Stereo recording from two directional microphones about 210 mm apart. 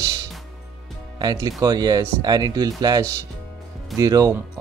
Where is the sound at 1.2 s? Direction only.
20° right (ahead or behind).